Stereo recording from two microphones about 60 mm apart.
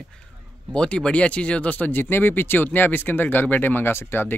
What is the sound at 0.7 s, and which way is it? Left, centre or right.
Speech, centre.